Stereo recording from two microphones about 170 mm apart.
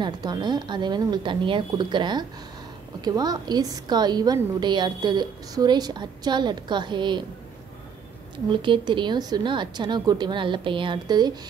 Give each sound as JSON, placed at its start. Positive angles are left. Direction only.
{"t": 0.0, "sound": "a woman's voice", "side_deg": -25}
{"t": 8.5, "sound": "a woman's voice", "side_deg": -30}